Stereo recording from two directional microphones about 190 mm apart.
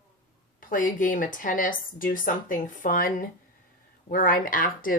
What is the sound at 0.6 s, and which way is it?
Speech, 45° left (ahead or behind).